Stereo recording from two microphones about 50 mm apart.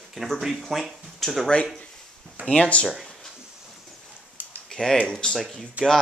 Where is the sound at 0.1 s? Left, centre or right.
Centre.